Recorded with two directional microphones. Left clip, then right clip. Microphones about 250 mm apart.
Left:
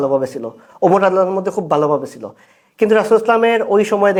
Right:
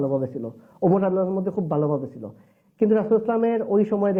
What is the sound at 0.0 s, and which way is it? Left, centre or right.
Speech, centre.